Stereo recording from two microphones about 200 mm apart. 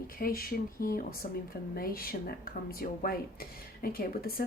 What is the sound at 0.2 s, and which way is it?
Speech, 45° left (ahead or behind).